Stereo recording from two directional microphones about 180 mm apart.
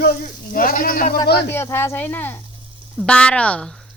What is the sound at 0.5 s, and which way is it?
Speech, 50° left (ahead or behind).